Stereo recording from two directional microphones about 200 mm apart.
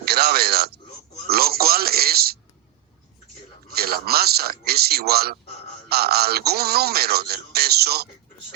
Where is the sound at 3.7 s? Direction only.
50° right (ahead or behind).